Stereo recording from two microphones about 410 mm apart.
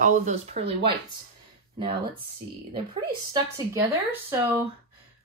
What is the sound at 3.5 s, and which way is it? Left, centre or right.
Speech, centre.